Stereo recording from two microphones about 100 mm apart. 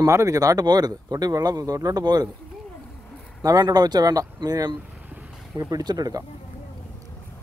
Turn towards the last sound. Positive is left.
turn(degrees=-40)  # may be behind; listen again after turning